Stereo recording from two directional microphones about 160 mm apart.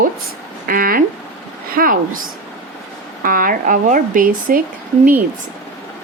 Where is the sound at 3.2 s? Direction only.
60° right (ahead or behind).